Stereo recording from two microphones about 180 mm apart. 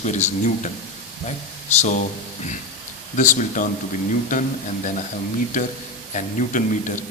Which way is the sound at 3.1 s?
45° left (ahead or behind).